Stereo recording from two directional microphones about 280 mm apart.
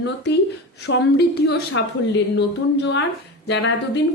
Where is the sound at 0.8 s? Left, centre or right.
Left.